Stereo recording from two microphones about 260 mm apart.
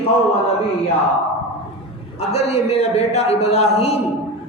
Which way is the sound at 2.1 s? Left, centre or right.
Left.